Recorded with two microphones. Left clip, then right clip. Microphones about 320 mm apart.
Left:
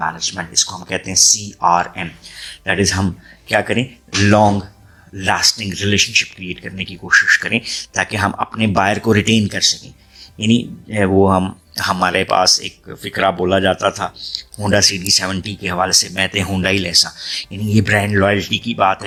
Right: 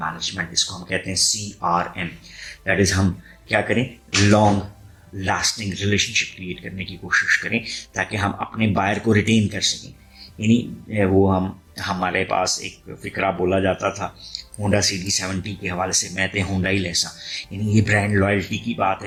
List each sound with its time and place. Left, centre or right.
0.0 s speech: left
5.1 s speech: left